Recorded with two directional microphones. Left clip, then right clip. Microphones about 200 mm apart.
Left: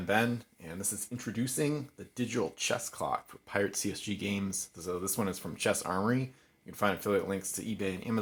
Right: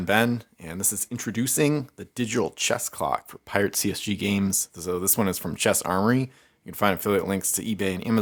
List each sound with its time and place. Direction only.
0.0 s speech: 35° right (ahead or behind)